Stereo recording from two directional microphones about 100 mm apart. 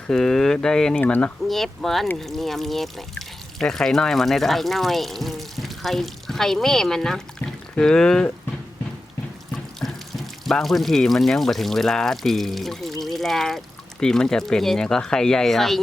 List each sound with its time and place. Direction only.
0.1 s speech: 5° left (ahead or behind)
1.5 s speech: centre (ahead or behind)
9.8 s speech: centre (ahead or behind)